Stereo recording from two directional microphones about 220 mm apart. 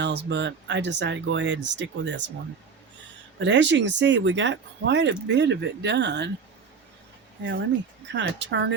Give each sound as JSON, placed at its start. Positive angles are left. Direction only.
{"t": 0.0, "sound": "speech", "side_deg": -50}
{"t": 3.3, "sound": "speech", "side_deg": -55}
{"t": 8.0, "sound": "speech", "side_deg": -55}